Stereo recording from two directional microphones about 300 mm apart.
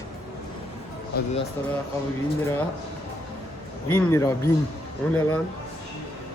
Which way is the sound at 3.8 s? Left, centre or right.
Centre.